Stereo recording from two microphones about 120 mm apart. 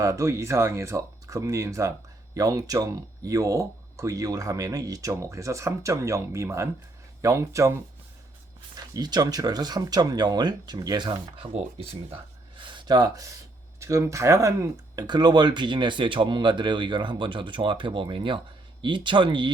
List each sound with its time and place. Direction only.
0.0 s speech: 25° right (ahead or behind)
8.8 s speech: 35° right (ahead or behind)
11.5 s speech: 55° right (ahead or behind)